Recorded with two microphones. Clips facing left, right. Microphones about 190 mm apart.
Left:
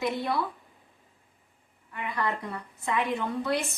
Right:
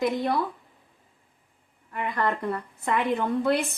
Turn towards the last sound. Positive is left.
turn(degrees=-55)  # may be behind; listen again after turning